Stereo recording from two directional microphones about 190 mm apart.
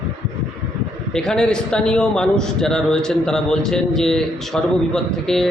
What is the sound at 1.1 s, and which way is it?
A man's voice, 5° left (ahead or behind).